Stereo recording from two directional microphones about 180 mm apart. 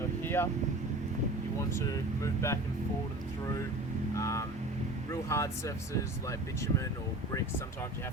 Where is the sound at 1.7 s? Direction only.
15° left (ahead or behind).